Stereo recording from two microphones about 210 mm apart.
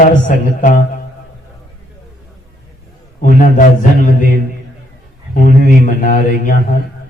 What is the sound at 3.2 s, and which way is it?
A man's voice, 40° left (ahead or behind).